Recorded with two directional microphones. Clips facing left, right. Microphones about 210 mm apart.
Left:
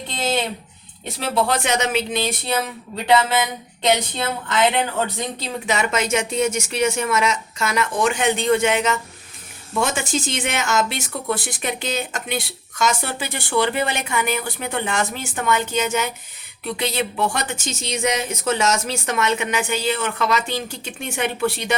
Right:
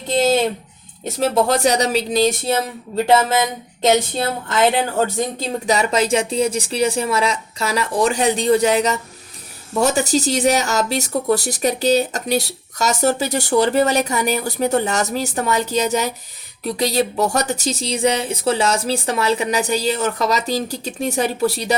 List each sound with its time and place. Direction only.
1.0 s speech: 45° right (ahead or behind)